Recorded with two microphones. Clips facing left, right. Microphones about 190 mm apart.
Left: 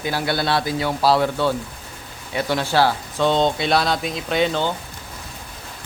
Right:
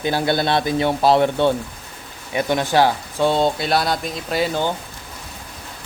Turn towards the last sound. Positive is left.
turn(degrees=-5)  # may be behind; listen again after turning